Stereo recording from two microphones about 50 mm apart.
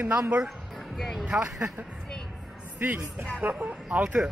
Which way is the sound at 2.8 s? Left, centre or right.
Right.